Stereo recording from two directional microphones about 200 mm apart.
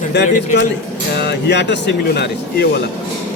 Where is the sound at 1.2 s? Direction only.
55° left (ahead or behind).